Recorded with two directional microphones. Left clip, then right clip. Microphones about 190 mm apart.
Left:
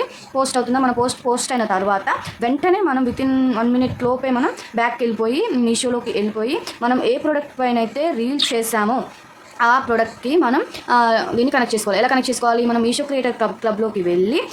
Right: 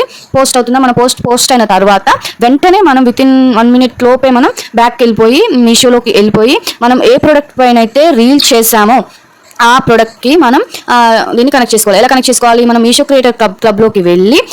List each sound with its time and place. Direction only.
0.0 s speech: 40° right (ahead or behind)